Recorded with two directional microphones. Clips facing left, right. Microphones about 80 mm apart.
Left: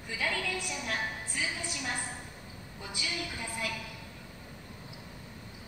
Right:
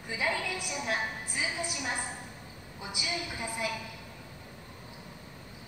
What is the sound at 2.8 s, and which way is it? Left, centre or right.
Speech, centre.